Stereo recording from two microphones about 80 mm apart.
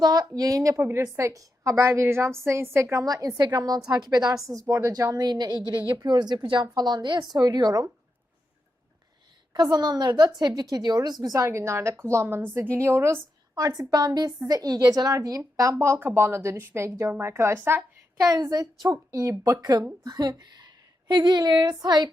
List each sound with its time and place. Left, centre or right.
0.0 s a woman's voice: right
3.0 s a woman's voice: right
4.7 s a woman's voice: right
6.0 s a woman's voice: right
7.3 s a woman's voice: right
9.5 s a woman's voice: right
13.6 s a woman's voice: right
18.2 s a woman's voice: right
20.1 s a woman's voice: right